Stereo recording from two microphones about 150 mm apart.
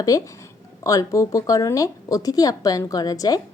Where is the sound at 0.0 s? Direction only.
20° left (ahead or behind).